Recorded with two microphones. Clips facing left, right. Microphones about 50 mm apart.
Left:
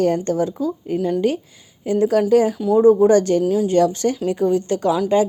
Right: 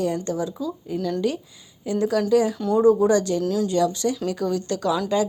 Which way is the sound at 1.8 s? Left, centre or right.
Left.